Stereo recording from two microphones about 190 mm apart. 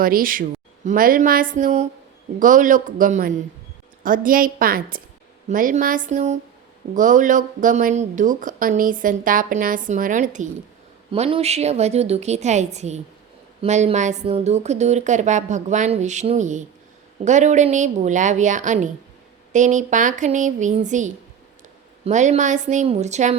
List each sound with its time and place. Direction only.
0.0 s a woman's voice: 50° right (ahead or behind)
11.1 s a woman's voice: 30° right (ahead or behind)